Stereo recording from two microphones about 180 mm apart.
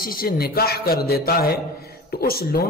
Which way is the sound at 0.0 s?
55° left (ahead or behind).